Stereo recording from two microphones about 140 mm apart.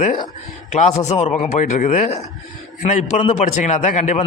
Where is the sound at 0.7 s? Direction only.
55° left (ahead or behind).